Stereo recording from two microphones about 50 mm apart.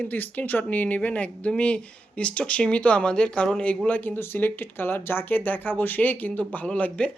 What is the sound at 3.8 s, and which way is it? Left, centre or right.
Speech, left.